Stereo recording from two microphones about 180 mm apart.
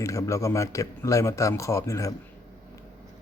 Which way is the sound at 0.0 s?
15° left (ahead or behind).